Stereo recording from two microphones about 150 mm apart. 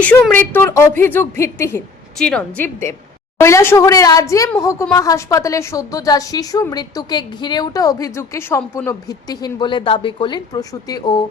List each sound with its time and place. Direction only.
0.0 s speech: 10° left (ahead or behind)
2.1 s a woman's voice: 5° left (ahead or behind)
3.3 s a woman's voice: 15° left (ahead or behind)